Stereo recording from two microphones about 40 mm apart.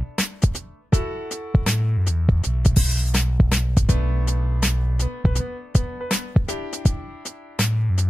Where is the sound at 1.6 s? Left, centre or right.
Centre.